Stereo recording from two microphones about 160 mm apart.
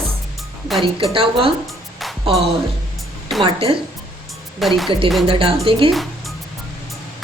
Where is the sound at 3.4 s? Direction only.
35° right (ahead or behind).